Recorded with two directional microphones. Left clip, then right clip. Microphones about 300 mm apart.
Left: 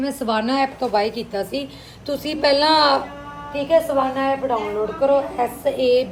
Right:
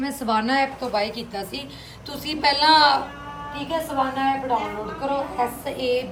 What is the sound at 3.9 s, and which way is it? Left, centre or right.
Speech, centre.